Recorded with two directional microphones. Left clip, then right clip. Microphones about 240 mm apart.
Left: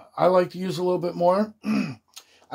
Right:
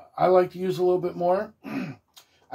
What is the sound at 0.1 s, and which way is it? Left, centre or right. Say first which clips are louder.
Speech: even; left.